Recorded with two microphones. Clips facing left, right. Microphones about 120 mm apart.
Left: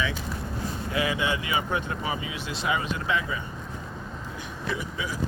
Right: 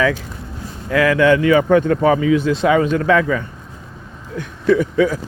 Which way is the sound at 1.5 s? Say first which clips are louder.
Right 15 dB; 50° right (ahead or behind).